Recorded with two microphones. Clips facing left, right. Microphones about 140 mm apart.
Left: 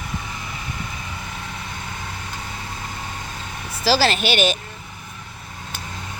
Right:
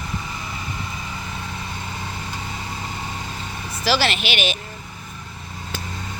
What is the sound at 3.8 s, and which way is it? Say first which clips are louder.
Speech: left 3 dB; 35° left (ahead or behind).